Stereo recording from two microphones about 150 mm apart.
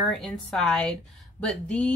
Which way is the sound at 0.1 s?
Centre (ahead or behind).